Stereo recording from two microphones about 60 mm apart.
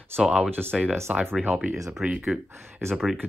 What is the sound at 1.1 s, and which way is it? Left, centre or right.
Speech, centre.